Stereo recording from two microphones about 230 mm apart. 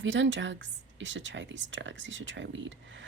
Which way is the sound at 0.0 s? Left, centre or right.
Right.